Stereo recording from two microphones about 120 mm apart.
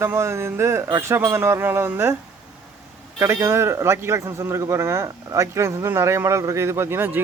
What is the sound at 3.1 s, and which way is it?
A man's voice, 25° right (ahead or behind).